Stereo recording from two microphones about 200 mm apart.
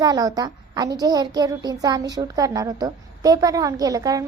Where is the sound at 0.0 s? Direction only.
20° right (ahead or behind).